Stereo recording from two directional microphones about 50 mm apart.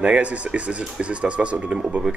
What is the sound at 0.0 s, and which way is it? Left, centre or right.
Speech, right.